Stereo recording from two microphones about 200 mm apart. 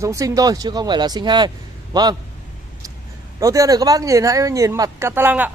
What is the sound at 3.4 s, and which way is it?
Speech, 15° right (ahead or behind).